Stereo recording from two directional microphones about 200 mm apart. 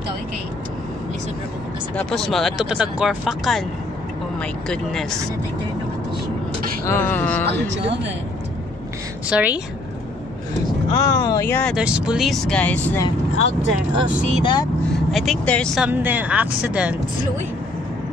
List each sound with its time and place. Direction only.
2.0 s speech: 5° left (ahead or behind)
6.9 s speech: 10° left (ahead or behind)
9.3 s a woman's voice: 5° right (ahead or behind)
10.9 s speech: 20° left (ahead or behind)
11.7 s speech: 5° right (ahead or behind)
14.4 s speech: 20° left (ahead or behind)
15.0 s speech: centre (ahead or behind)